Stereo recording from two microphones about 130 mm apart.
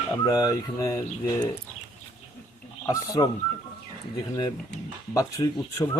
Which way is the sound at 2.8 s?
25° left (ahead or behind).